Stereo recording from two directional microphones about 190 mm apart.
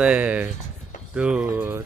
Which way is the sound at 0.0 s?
5° right (ahead or behind).